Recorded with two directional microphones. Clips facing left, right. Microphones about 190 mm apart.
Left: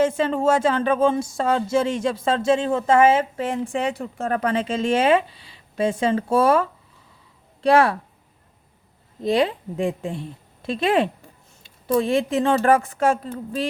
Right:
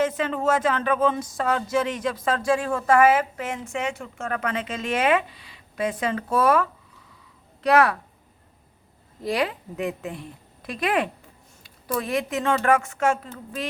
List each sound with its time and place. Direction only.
0.0 s speech: 30° left (ahead or behind)
9.2 s speech: 25° left (ahead or behind)